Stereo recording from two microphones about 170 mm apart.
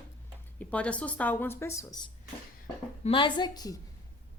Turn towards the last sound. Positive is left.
turn(degrees=20)  # may be behind; listen again after turning